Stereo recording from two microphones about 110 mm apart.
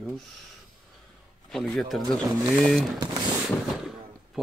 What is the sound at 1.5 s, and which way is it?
Speech, 5° left (ahead or behind).